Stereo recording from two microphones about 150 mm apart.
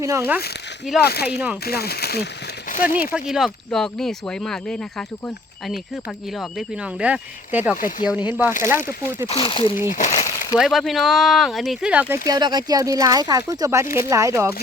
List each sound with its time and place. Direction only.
0.0 s speech: 20° right (ahead or behind)
1.0 s speech: 90° left
2.6 s a sound: 65° left (ahead or behind)
2.9 s speech: 10° right (ahead or behind)
7.8 s speech: 65° left (ahead or behind)
8.0 s speech: 10° right (ahead or behind)
9.2 s speech: 40° left (ahead or behind)
9.9 s speech: 55° left (ahead or behind)
10.6 s speech: centre (ahead or behind); by 14.5 s 20° right (ahead or behind)